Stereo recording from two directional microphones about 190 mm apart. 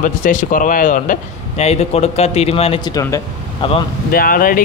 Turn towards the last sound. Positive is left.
turn(degrees=50)  # may be behind; listen again after turning